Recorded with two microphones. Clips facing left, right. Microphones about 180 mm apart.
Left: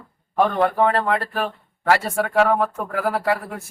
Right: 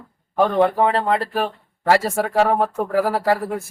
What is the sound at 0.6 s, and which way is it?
Speech, 25° right (ahead or behind).